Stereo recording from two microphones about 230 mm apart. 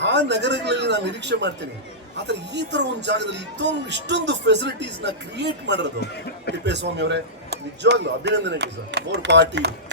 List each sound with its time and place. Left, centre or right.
0.0 s speech: right